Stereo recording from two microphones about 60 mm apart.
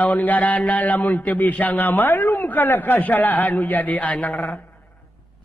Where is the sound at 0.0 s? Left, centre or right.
Left.